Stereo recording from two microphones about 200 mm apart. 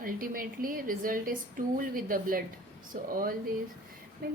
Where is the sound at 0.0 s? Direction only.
45° right (ahead or behind).